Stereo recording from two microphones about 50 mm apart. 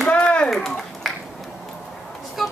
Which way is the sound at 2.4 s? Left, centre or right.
Centre.